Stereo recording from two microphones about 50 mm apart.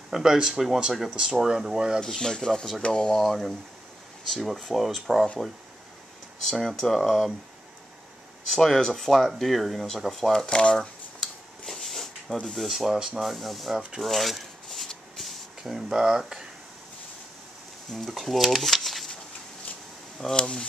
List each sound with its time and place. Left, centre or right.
0.1 s speech: centre
2.0 s speech: centre
6.7 s speech: centre
8.5 s speech: centre
9.3 s a sound: centre
12.4 s speech: centre
14.0 s a sound: centre
18.1 s speech: centre
20.3 s speech: centre